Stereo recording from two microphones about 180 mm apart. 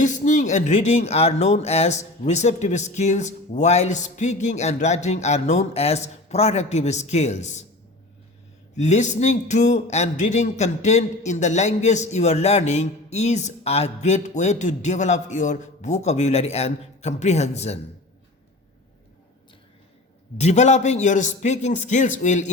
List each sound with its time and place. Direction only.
0.0 s a man's voice: 45° left (ahead or behind)
8.7 s a man's voice: 40° left (ahead or behind)
20.4 s a man's voice: 40° left (ahead or behind)